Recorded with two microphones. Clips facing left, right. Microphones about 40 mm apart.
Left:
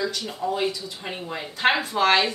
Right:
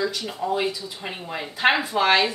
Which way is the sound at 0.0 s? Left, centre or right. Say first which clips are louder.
Right 1 dB; centre.